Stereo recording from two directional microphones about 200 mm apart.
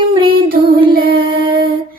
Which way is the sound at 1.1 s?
25° right (ahead or behind).